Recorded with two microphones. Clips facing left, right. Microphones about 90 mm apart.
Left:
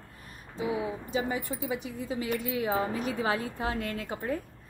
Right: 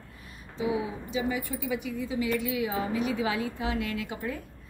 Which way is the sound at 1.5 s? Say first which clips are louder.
Right 2 dB; 30° left (ahead or behind).